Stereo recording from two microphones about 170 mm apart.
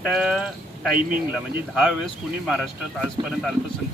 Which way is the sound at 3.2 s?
30° right (ahead or behind).